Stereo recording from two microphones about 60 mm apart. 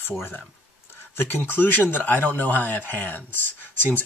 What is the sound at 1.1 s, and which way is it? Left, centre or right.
Speech, left.